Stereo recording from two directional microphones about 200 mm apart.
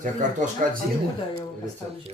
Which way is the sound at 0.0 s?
40° right (ahead or behind).